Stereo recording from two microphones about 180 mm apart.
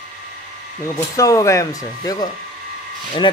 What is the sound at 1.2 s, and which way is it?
Speech, 20° left (ahead or behind).